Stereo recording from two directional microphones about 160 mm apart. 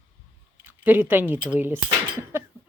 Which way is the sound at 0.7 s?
10° right (ahead or behind).